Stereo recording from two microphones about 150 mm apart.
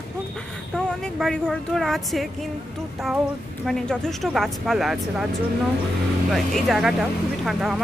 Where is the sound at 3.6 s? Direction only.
5° left (ahead or behind).